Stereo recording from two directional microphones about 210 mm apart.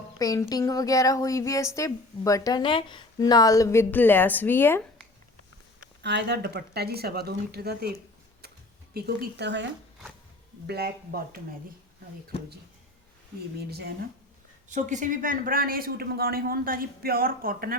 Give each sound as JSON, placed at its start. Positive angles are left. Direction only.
{"t": 0.2, "sound": "speech", "side_deg": 15}
{"t": 6.0, "sound": "speech", "side_deg": -55}
{"t": 10.7, "sound": "speech", "side_deg": -50}
{"t": 13.6, "sound": "speech", "side_deg": -50}
{"t": 14.7, "sound": "speech", "side_deg": -35}